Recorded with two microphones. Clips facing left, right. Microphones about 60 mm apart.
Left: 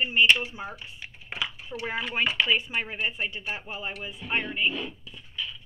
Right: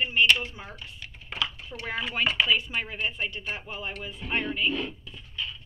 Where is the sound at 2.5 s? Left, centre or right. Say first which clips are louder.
Even; centre.